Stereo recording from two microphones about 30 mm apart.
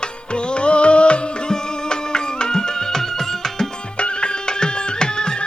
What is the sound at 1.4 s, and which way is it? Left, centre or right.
Music, left.